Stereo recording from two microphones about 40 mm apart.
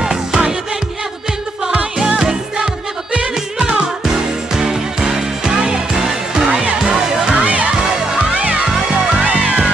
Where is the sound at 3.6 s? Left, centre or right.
Centre.